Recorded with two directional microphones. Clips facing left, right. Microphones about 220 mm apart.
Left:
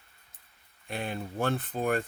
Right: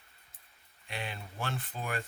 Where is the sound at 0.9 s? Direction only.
50° left (ahead or behind).